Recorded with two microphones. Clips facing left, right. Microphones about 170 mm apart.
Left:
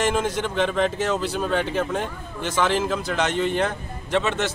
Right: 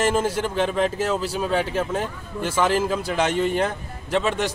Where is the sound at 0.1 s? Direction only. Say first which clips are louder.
Right 1 dB; 5° right (ahead or behind).